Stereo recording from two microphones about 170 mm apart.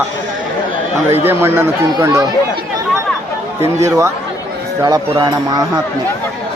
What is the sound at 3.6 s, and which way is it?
Speech, 15° right (ahead or behind).